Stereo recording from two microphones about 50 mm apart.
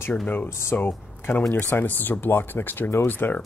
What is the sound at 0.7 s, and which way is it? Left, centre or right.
Speech, left.